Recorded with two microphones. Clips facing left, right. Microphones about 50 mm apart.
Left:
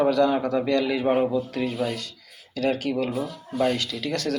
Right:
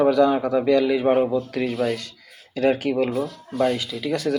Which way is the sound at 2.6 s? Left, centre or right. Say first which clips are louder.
Right 4 dB; right.